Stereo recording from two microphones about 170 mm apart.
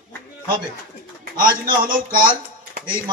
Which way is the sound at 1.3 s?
55° right (ahead or behind).